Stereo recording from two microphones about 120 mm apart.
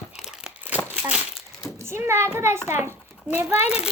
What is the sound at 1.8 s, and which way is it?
A child's voice, 20° right (ahead or behind).